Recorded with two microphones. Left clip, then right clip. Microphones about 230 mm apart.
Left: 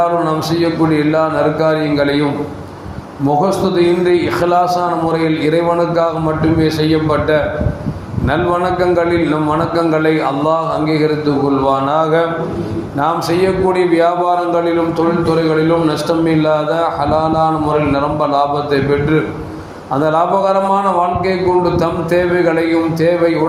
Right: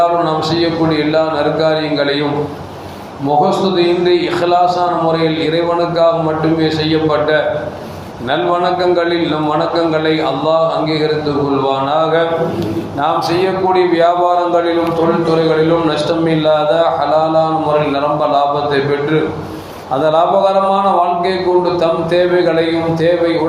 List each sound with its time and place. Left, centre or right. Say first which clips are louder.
0.9 s speech: even; left
3.8 s speech: left 2 dB; left
6.0 s speech: right 3 dB; left
8.3 s a man's voice: right 1 dB; left
11.6 s a man's voice: even; left
16.2 s speech: right 2 dB; left
20.0 s speech: right 2 dB; left